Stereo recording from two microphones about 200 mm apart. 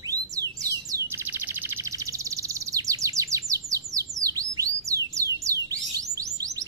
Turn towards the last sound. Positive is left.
turn(degrees=-15)  # may be behind; listen again after turning